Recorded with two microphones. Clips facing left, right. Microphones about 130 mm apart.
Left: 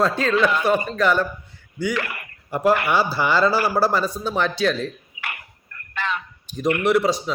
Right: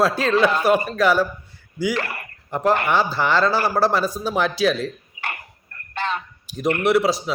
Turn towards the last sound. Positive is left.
turn(degrees=0)  # may be behind; listen again after turning